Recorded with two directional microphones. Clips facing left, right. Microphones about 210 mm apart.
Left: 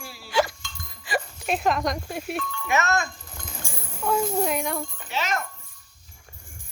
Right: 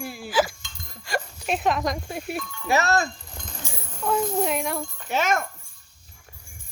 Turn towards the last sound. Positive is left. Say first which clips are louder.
# right 5 dB
turn(degrees=-50)  # may be behind; listen again after turning